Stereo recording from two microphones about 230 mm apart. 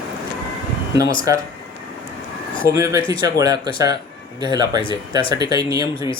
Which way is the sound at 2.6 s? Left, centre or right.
Centre.